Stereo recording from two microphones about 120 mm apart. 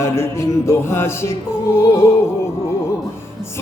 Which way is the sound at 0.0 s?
25° left (ahead or behind).